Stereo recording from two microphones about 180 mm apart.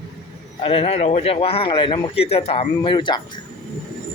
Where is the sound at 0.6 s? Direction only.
30° left (ahead or behind).